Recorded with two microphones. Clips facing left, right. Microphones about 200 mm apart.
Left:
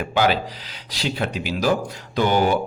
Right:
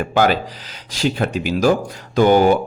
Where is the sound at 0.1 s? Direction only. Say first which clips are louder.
Right 3 dB; 45° right (ahead or behind).